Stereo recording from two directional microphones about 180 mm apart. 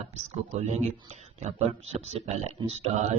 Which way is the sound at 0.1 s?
40° right (ahead or behind).